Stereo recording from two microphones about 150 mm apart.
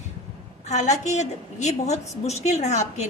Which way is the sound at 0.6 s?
50° left (ahead or behind).